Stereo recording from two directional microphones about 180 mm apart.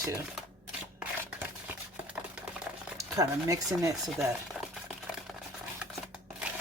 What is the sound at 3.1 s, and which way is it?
Speech, 20° right (ahead or behind).